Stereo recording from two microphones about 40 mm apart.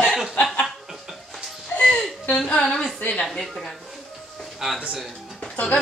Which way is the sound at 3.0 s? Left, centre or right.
Left.